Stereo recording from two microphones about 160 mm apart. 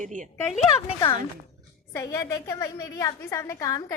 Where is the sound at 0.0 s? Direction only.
50° right (ahead or behind).